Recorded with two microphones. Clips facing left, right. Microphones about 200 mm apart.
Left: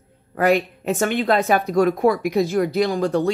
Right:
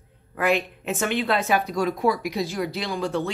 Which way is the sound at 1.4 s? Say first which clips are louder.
Left 6 dB; 55° left (ahead or behind).